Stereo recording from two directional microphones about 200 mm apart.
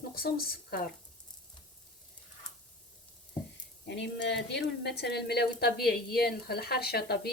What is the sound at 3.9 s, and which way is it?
A woman's voice, 60° left (ahead or behind).